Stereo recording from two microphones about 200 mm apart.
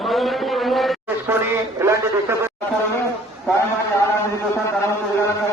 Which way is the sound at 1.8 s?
10° right (ahead or behind).